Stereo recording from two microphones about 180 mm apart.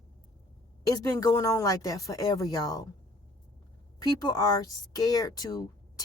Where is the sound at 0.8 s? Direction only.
20° left (ahead or behind).